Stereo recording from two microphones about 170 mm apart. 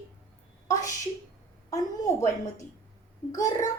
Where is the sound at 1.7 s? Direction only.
20° left (ahead or behind).